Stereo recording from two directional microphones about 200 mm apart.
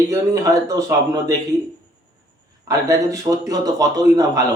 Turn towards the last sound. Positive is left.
turn(degrees=-15)  # may be behind; listen again after turning